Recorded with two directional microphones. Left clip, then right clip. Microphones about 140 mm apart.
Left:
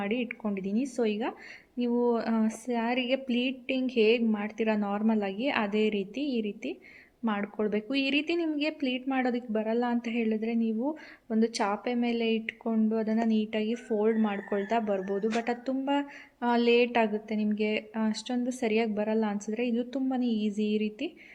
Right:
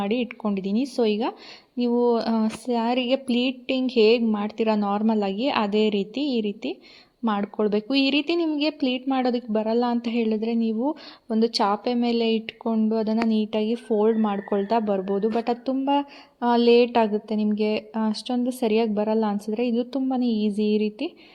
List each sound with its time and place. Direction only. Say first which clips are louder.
0.0 s speech: right 6 dB; 40° right (ahead or behind)